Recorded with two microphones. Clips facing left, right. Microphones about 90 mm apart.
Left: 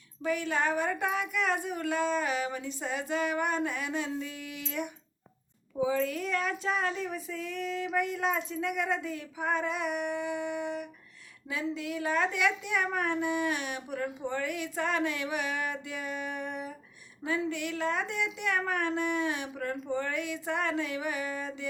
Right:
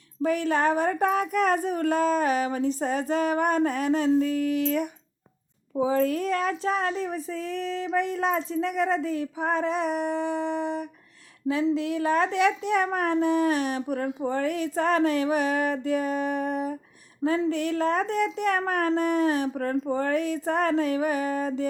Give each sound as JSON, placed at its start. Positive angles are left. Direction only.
{"t": 0.2, "sound": "speech", "side_deg": -40}